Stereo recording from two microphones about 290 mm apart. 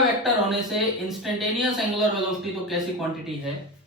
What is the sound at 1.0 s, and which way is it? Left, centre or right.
Speech, centre.